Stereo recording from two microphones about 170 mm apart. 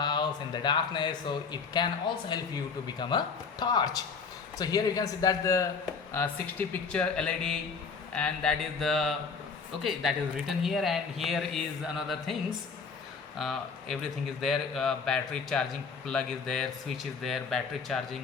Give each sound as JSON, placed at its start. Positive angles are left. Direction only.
{"t": 0.0, "sound": "speech", "side_deg": 25}
{"t": 6.1, "sound": "speech", "side_deg": 10}